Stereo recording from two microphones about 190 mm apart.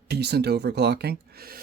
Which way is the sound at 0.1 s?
60° right (ahead or behind).